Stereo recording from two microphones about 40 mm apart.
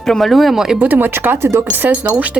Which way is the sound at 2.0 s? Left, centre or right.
Right.